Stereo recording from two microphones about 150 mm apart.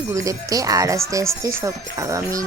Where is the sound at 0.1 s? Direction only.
20° right (ahead or behind).